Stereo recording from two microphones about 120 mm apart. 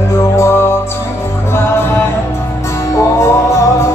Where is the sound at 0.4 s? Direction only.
20° left (ahead or behind).